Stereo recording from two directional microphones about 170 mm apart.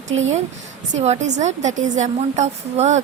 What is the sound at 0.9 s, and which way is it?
A woman's voice, 40° right (ahead or behind).